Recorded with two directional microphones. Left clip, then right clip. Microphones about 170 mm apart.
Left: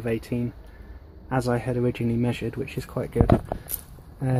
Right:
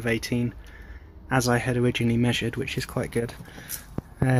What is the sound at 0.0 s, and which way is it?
Speech, centre (ahead or behind).